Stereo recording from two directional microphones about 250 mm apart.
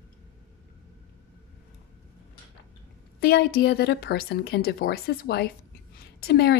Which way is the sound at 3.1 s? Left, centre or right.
Left.